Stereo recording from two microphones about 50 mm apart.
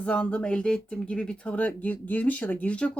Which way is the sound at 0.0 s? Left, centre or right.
Left.